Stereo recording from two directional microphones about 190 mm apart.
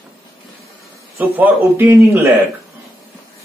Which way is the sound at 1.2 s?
10° right (ahead or behind).